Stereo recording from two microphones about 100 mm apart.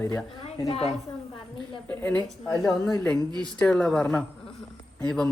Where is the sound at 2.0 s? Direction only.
15° left (ahead or behind).